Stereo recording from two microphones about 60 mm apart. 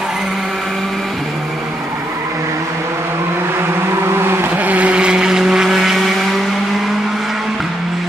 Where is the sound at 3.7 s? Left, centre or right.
Right.